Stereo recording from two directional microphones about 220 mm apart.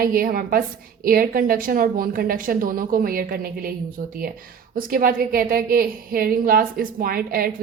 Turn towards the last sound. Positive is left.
turn(degrees=-40)  # may be behind; listen again after turning